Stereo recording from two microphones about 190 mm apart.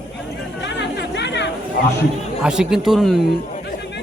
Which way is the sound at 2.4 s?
5° right (ahead or behind).